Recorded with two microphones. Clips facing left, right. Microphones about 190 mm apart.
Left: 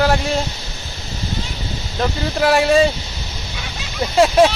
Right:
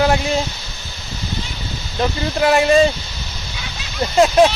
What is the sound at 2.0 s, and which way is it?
Speech, centre (ahead or behind).